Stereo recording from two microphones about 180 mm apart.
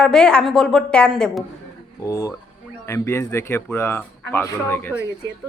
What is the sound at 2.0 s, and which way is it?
A man's voice, 20° left (ahead or behind).